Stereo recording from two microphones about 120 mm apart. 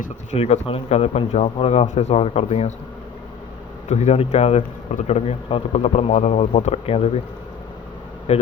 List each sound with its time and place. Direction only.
0.0 s speech: 75° left (ahead or behind)
3.8 s speech: 75° left (ahead or behind); by 7.2 s 55° left (ahead or behind)
8.3 s speech: 65° left (ahead or behind)